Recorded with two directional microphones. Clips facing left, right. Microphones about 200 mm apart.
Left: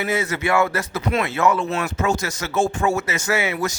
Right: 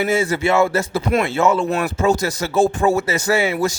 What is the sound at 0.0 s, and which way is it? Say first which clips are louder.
A man's voice: right 5 dB; 30° right (ahead or behind).